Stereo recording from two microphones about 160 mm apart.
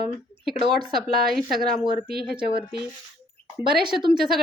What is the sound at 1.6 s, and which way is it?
Speech, 25° right (ahead or behind).